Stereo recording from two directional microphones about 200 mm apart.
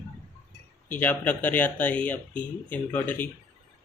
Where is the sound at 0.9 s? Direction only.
10° left (ahead or behind).